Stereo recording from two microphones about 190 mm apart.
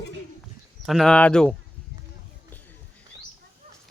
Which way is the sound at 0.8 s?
Centre (ahead or behind).